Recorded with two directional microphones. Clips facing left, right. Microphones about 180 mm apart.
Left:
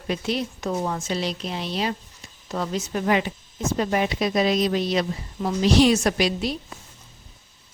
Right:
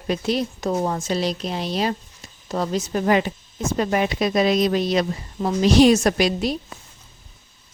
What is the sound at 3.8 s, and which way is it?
Speech, 60° right (ahead or behind).